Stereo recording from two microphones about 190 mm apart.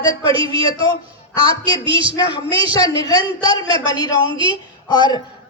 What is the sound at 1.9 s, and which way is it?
Speech, 25° right (ahead or behind).